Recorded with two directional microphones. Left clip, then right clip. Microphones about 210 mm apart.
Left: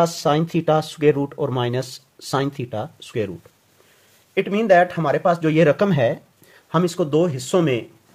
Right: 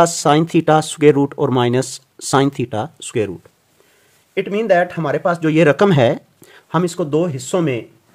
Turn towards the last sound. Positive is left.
turn(degrees=-10)  # may be behind; listen again after turning